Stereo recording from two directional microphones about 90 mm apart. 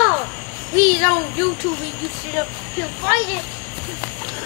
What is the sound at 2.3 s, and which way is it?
Speech, 20° left (ahead or behind).